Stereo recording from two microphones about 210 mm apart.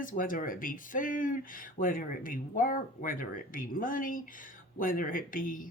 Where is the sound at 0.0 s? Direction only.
40° left (ahead or behind).